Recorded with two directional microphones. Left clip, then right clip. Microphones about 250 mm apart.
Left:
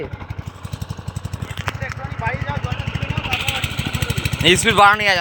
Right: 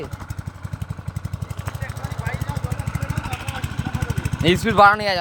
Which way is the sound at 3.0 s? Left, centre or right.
Centre.